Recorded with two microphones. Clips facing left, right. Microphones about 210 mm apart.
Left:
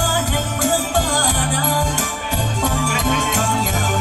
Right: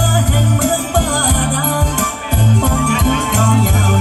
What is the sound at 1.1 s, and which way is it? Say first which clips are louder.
Music: right 4 dB; 55° right (ahead or behind).